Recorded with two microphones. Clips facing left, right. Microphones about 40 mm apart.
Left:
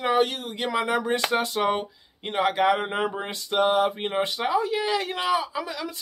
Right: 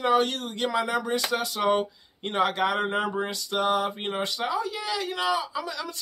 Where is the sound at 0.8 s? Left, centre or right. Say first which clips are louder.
Left 2 dB; left.